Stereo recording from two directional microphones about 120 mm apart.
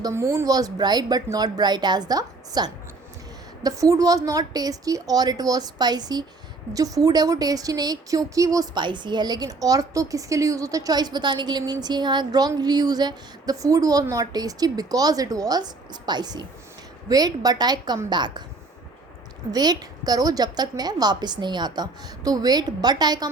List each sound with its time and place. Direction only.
0.1 s a woman's voice: 20° right (ahead or behind); by 18.4 s 40° right (ahead or behind)
19.5 s a woman's voice: 30° right (ahead or behind)